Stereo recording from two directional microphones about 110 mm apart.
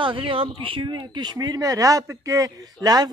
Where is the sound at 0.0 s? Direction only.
50° right (ahead or behind).